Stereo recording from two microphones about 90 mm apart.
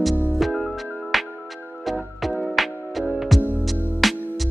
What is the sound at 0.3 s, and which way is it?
Music, centre (ahead or behind).